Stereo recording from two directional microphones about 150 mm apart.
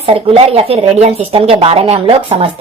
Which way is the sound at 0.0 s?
40° right (ahead or behind).